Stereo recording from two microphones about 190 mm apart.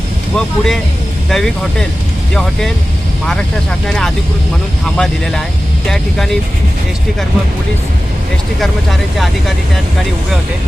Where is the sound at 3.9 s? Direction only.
5° left (ahead or behind).